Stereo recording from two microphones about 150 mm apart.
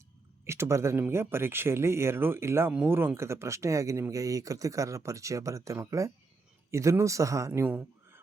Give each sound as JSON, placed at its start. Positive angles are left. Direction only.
{"t": 0.4, "sound": "speech", "side_deg": -15}